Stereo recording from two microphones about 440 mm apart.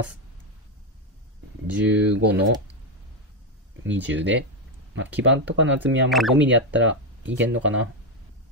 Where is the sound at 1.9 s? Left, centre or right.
Centre.